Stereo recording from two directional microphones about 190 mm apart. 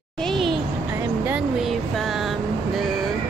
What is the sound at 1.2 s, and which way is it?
Vehicle, 5° right (ahead or behind).